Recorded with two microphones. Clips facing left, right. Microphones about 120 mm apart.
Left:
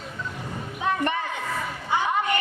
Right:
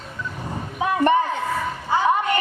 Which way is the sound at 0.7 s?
40° right (ahead or behind).